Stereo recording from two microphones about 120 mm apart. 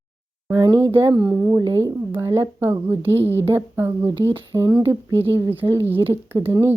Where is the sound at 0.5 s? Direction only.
30° right (ahead or behind).